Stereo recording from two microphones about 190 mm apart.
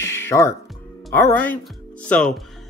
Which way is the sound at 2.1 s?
5° left (ahead or behind).